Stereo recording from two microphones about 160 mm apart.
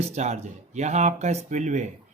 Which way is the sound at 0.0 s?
45° right (ahead or behind).